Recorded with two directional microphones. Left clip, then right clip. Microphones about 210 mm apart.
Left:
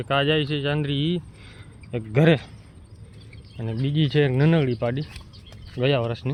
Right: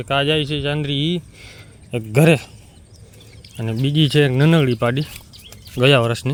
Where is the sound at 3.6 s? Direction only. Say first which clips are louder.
Right 7 dB; 25° right (ahead or behind).